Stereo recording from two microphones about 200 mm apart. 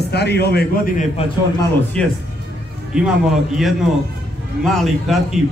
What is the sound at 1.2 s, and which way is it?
Speech, 30° left (ahead or behind).